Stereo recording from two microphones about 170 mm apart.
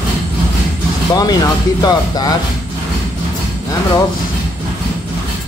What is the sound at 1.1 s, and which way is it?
Speech, 25° left (ahead or behind).